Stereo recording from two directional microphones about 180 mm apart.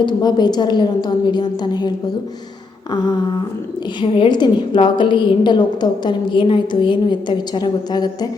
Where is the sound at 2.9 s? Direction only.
25° left (ahead or behind).